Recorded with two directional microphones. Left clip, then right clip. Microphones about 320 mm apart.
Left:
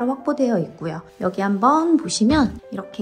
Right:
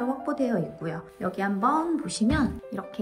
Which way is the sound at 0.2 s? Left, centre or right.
Centre.